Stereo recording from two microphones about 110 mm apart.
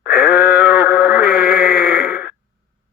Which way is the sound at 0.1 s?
Centre (ahead or behind).